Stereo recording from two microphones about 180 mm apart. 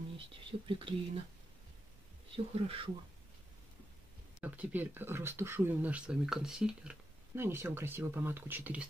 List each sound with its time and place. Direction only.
0.5 s speech: 30° right (ahead or behind)
2.3 s speech: 30° right (ahead or behind)
4.4 s speech: 10° right (ahead or behind)